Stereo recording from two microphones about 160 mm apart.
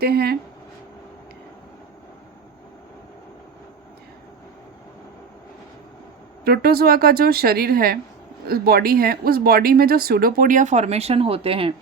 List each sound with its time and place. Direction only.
0.0 s speech: 75° right (ahead or behind)
6.4 s speech: 75° right (ahead or behind); by 11.7 s 35° right (ahead or behind)